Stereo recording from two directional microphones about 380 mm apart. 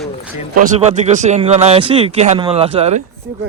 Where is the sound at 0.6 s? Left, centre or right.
Centre.